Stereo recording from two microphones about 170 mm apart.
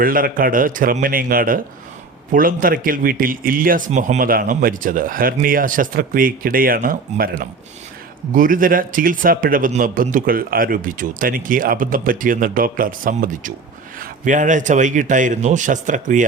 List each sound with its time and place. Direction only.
0.0 s speech: 55° right (ahead or behind)